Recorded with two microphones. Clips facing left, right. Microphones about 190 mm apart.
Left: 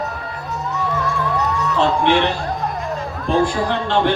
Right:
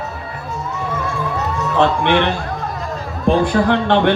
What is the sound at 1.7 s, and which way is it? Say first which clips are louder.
Speech: right 2 dB; 60° right (ahead or behind).